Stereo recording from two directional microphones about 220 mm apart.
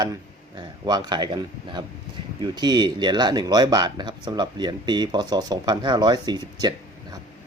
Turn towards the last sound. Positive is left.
turn(degrees=-15)  # may be behind; listen again after turning